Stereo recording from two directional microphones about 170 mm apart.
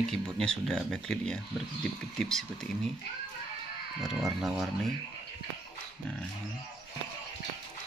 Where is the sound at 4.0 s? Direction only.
Centre (ahead or behind).